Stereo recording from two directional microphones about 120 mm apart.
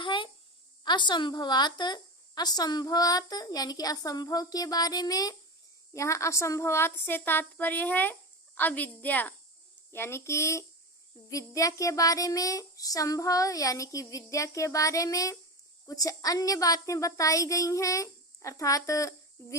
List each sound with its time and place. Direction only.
0.0 s a sound: 45° left (ahead or behind)
0.9 s a woman's voice: 40° left (ahead or behind)
5.9 s child singing: 25° left (ahead or behind)
8.5 s a woman's voice: 15° left (ahead or behind)
9.9 s child singing: 20° left (ahead or behind)